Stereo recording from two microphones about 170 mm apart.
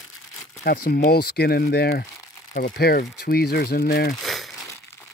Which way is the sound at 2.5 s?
60° left (ahead or behind).